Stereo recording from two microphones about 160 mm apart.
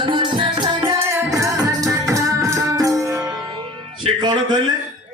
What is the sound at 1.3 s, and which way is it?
Music, 20° right (ahead or behind).